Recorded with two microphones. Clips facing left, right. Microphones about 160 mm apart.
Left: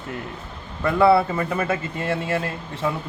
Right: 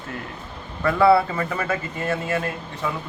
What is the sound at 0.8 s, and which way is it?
A man's voice, 25° left (ahead or behind).